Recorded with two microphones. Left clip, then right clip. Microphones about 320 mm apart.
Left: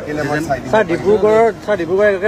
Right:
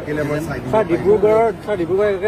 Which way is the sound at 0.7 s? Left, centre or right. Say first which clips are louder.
Left 1 dB; left.